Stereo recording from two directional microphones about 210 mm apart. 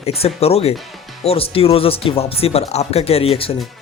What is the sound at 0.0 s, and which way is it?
Speech, 30° left (ahead or behind).